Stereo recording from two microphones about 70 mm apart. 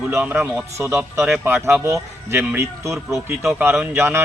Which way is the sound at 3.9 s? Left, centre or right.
Right.